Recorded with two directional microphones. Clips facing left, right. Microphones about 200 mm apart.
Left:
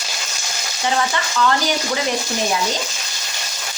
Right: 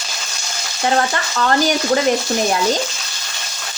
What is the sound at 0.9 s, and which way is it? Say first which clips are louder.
Speech: even; 45° right (ahead or behind).